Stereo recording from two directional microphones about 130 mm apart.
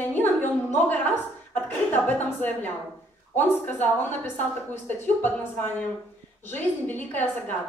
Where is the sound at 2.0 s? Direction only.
15° left (ahead or behind).